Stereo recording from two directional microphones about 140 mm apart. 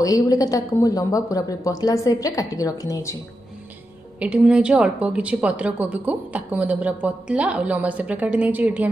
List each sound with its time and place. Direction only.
0.0 s speech: 25° left (ahead or behind)
4.2 s a woman's voice: 10° right (ahead or behind)